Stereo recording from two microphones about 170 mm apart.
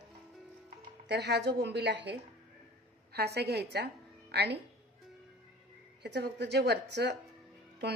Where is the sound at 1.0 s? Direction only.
85° right.